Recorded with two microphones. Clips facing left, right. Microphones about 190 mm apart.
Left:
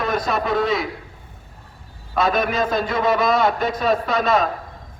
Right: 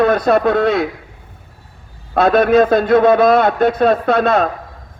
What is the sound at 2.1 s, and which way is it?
A man's voice, 60° right (ahead or behind).